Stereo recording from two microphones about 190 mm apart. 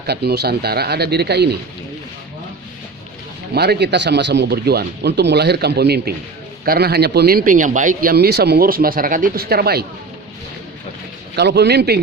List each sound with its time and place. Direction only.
0.0 s speech: 60° right (ahead or behind)
3.5 s a man's voice: 60° right (ahead or behind)
11.3 s speech: 60° right (ahead or behind)